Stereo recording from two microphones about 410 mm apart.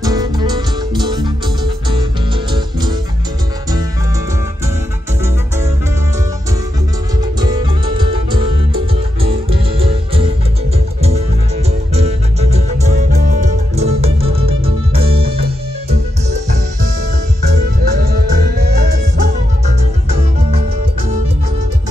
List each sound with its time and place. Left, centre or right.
0.0 s music: centre
2.5 s music: centre
7.3 s music: centre
11.9 s music: centre
17.5 s music: right